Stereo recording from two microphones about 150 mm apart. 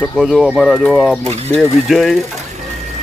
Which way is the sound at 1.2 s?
45° right (ahead or behind).